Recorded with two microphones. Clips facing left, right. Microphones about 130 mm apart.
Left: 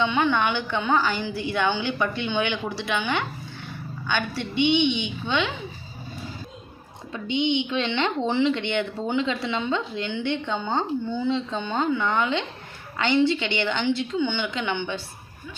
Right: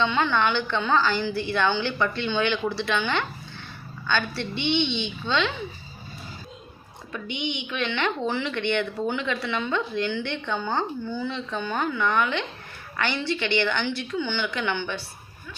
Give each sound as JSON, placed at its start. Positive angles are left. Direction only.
{"t": 0.0, "sound": "a woman's voice", "side_deg": 15}
{"t": 7.1, "sound": "a woman's voice", "side_deg": 20}